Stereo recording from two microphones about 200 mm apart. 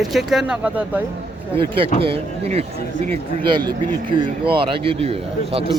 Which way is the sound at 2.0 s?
30° right (ahead or behind).